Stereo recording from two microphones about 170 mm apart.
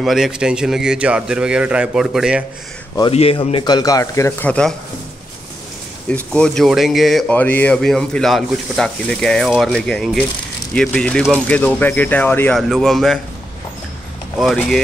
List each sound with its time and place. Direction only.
0.0 s speech: centre (ahead or behind)
3.1 s speech: 35° left (ahead or behind); by 4.7 s 5° left (ahead or behind)
6.0 s speech: 5° left (ahead or behind)
14.4 s speech: centre (ahead or behind)